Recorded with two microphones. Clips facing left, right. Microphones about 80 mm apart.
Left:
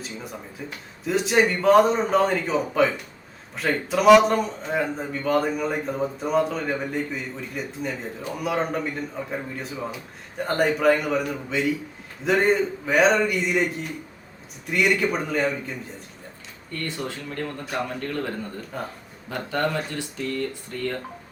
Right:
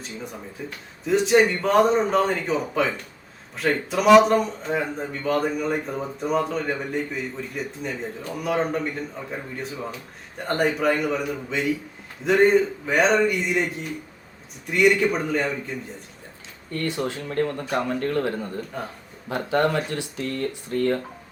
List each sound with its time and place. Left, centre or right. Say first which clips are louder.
0.0 s a man's voice: even; centre
17.2 s speech: right 6 dB; right
18.7 s a man's voice: left 3 dB; centre
19.3 s speech: right 4 dB; right